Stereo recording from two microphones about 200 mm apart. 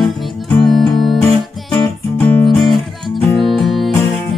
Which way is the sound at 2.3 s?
5° left (ahead or behind).